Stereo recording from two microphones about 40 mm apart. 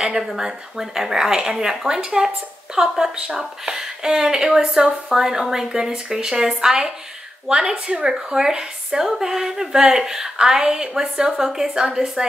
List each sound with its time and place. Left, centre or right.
0.4 s a woman's voice: centre